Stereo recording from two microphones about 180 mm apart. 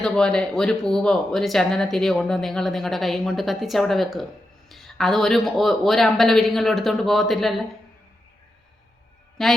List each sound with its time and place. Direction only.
0.0 s speech: 5° left (ahead or behind)
9.4 s speech: centre (ahead or behind)